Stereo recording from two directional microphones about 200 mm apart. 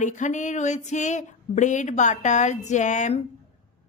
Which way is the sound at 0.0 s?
35° left (ahead or behind).